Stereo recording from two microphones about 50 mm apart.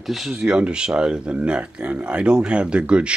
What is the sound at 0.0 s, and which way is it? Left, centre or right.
Speech, centre.